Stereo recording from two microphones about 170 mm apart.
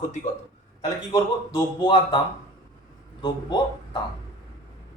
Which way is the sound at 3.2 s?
25° left (ahead or behind).